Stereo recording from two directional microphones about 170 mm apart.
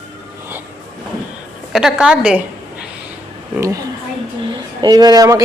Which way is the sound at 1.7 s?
5° right (ahead or behind).